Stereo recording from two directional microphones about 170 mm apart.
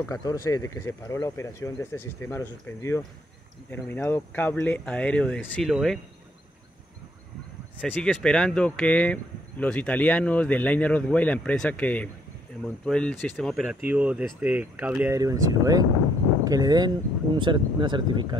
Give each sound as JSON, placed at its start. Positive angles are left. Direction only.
{"t": 0.1, "sound": "speech", "side_deg": 20}
{"t": 7.8, "sound": "speech", "side_deg": 10}